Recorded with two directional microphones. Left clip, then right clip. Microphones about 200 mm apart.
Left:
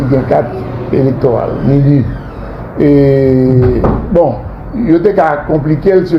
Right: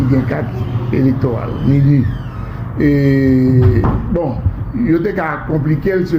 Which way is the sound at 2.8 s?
35° left (ahead or behind).